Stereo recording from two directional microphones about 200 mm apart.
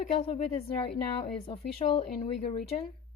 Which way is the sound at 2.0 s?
30° left (ahead or behind).